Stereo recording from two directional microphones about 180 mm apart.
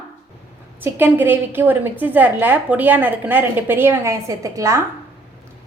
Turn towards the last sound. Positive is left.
turn(degrees=-15)  # may be behind; listen again after turning